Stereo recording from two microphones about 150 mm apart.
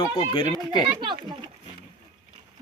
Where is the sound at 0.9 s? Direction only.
30° right (ahead or behind).